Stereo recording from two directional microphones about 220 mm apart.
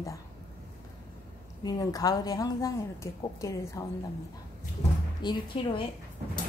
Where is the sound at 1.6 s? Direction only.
15° left (ahead or behind).